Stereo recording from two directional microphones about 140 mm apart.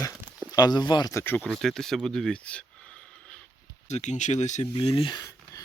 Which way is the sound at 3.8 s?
55° left (ahead or behind).